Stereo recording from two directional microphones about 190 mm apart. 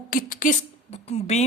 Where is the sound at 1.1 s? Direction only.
35° left (ahead or behind).